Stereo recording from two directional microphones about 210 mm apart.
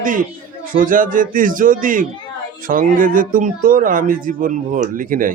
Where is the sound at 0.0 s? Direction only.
40° right (ahead or behind).